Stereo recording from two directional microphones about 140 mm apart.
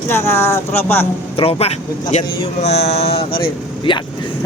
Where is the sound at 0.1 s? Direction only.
20° left (ahead or behind).